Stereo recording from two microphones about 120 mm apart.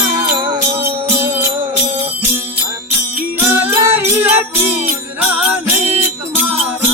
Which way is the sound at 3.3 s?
15° right (ahead or behind).